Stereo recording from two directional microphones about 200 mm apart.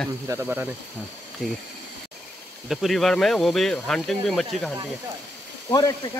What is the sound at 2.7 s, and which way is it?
Speech, centre (ahead or behind).